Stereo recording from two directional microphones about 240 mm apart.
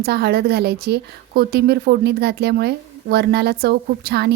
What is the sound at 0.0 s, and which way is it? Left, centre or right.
A woman's voice, right.